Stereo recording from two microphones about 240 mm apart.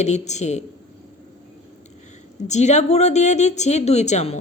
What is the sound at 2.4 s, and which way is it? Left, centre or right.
Speech, left.